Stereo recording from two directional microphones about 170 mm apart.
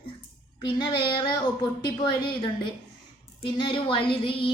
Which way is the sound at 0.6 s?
25° left (ahead or behind).